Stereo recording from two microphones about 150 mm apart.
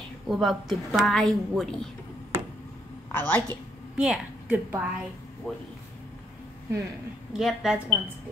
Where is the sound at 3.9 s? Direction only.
10° right (ahead or behind).